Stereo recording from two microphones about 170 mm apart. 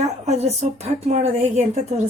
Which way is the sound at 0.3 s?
40° right (ahead or behind).